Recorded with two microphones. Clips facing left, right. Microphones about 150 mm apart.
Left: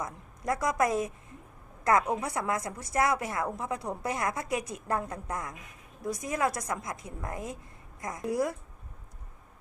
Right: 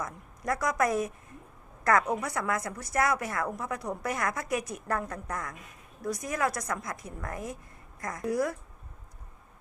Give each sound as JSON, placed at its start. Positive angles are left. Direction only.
{"t": 0.0, "sound": "a woman's voice", "side_deg": 25}